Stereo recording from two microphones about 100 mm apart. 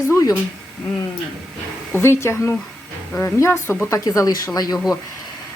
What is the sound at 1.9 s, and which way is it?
Speech, 25° left (ahead or behind).